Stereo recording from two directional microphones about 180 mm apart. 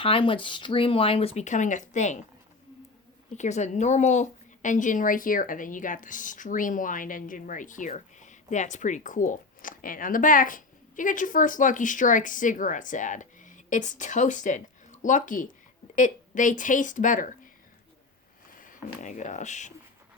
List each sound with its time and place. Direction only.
0.0 s speech: 30° left (ahead or behind)
3.3 s a woman's voice: 40° left (ahead or behind)
18.6 s speech: 45° left (ahead or behind)